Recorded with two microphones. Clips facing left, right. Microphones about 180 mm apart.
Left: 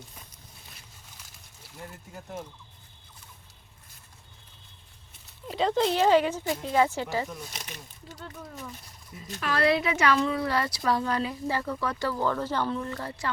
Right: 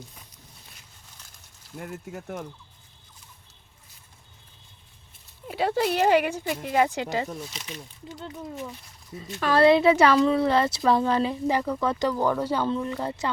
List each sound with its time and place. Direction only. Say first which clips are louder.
1.8 s speech: right 6 dB; 70° right (ahead or behind)
5.5 s speech: even; 5° right (ahead or behind)
9.5 s speech: right 7 dB; 25° right (ahead or behind)